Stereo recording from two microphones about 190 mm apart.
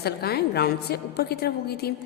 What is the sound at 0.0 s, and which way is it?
A woman's voice, 55° left (ahead or behind).